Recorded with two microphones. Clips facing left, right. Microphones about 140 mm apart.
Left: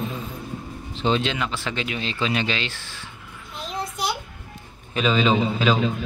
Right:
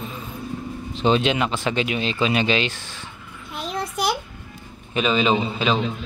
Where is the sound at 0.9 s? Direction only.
15° right (ahead or behind).